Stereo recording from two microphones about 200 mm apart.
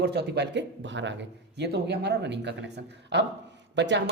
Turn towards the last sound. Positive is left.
turn(degrees=-60)  # may be behind; listen again after turning